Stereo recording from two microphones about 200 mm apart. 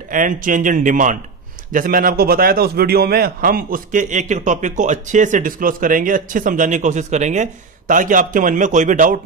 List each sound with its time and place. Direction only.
0.1 s a man's voice: 40° right (ahead or behind)